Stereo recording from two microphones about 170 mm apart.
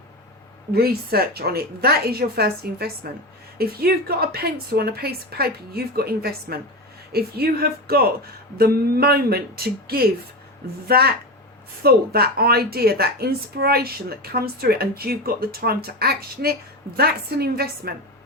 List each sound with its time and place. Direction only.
0.7 s a woman's voice: 65° right (ahead or behind)